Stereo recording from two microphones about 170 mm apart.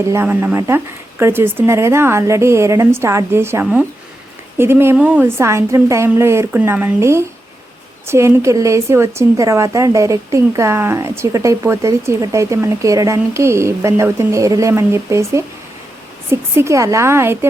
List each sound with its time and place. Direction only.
0.0 s speech: 15° right (ahead or behind)